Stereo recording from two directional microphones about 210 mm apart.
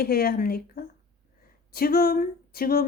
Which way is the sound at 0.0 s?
45° left (ahead or behind).